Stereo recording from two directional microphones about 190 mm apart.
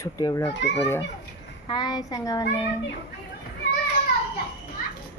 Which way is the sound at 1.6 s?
20° left (ahead or behind).